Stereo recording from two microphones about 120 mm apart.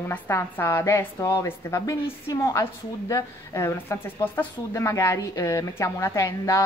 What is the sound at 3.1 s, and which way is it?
A woman's voice, 25° left (ahead or behind).